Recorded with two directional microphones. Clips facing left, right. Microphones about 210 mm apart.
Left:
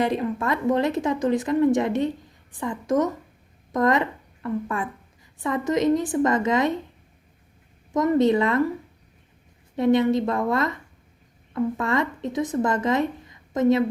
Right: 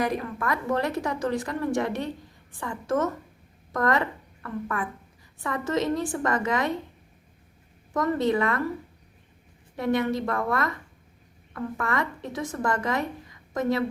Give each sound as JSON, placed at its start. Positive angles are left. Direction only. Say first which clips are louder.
{"t": 0.0, "sound": "a woman's voice", "louder": "left 4 dB", "side_deg": 25}
{"t": 7.9, "sound": "a woman's voice", "louder": "left 5 dB", "side_deg": 20}
{"t": 9.7, "sound": "a woman's voice", "louder": "left 6 dB", "side_deg": 20}